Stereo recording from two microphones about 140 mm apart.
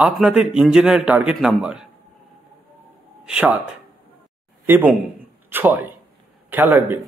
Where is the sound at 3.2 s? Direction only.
5° right (ahead or behind).